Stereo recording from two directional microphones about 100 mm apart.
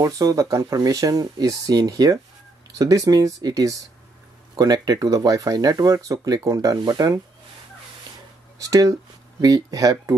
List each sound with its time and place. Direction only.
0.0 s speech: 35° right (ahead or behind)
8.6 s speech: 35° right (ahead or behind)